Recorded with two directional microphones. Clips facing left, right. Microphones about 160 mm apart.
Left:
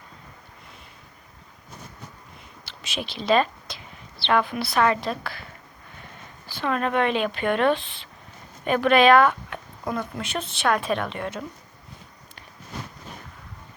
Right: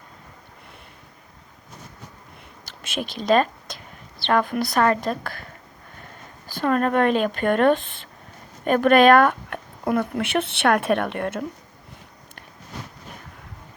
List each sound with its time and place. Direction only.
2.6 s speech: 50° right (ahead or behind)
6.5 s speech: 45° right (ahead or behind)